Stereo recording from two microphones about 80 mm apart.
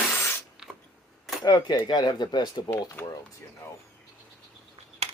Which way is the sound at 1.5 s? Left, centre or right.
Left.